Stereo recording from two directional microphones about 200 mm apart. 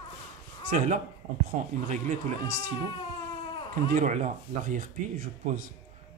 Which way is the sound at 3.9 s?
40° right (ahead or behind).